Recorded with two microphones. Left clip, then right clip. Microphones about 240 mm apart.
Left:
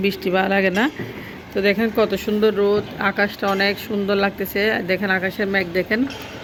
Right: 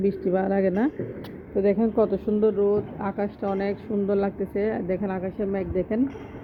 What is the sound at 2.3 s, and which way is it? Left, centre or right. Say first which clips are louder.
Speech: left 4 dB; centre.